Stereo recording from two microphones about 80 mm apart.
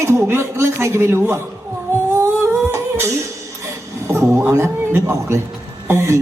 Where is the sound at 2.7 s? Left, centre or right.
Right.